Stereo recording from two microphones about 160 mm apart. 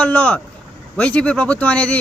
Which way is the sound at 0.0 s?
10° left (ahead or behind).